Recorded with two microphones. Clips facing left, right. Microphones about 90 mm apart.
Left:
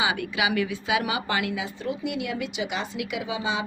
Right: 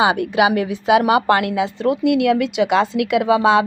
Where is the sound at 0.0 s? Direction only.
50° right (ahead or behind).